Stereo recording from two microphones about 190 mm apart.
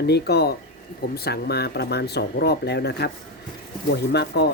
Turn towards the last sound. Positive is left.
turn(degrees=60)  # may be behind; listen again after turning